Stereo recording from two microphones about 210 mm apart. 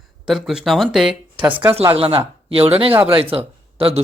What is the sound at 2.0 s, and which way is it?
Speech, 25° right (ahead or behind).